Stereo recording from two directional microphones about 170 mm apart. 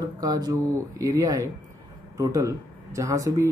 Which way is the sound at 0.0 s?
20° right (ahead or behind).